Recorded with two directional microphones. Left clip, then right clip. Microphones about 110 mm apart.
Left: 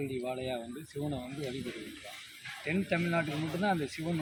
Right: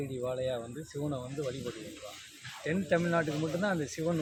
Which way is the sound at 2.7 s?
35° right (ahead or behind).